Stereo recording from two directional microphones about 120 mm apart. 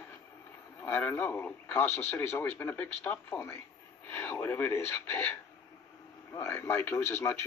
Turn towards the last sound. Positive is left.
turn(degrees=20)  # may be behind; listen again after turning